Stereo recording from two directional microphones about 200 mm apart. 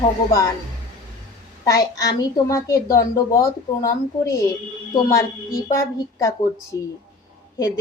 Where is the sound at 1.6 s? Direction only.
20° left (ahead or behind).